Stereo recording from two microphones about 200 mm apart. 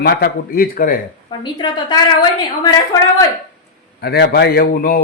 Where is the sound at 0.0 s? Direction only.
55° left (ahead or behind).